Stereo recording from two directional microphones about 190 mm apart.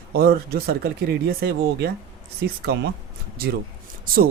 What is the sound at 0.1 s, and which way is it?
Speech, 55° right (ahead or behind).